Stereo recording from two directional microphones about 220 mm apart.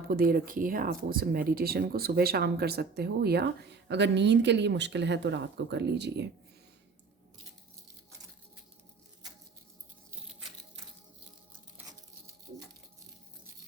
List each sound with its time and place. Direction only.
0.1 s speech: 40° right (ahead or behind)